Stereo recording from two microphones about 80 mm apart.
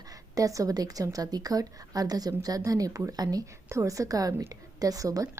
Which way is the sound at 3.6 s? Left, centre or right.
Right.